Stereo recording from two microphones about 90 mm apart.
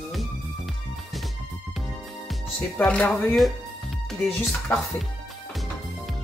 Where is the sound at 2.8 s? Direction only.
10° left (ahead or behind).